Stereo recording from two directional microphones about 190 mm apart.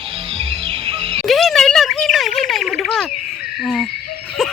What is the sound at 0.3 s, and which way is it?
Music, 30° right (ahead or behind).